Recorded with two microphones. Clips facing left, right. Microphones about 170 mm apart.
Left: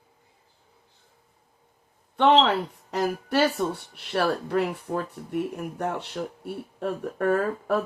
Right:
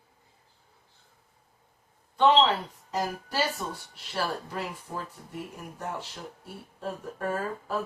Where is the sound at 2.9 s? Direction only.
65° left (ahead or behind).